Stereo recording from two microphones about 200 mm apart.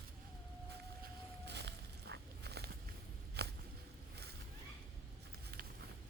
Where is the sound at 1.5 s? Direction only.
60° right (ahead or behind).